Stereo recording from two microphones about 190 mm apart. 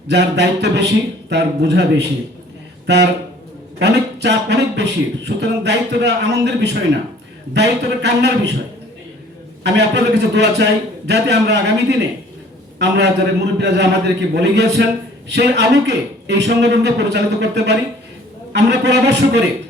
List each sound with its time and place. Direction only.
0.1 s a man's voice: 65° right (ahead or behind)
9.6 s a man's voice: 65° right (ahead or behind)